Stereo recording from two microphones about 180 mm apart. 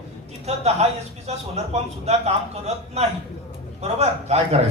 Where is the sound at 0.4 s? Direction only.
35° right (ahead or behind).